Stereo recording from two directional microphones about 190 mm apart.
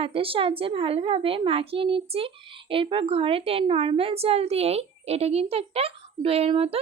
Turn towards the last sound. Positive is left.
turn(degrees=-30)  # may be behind; listen again after turning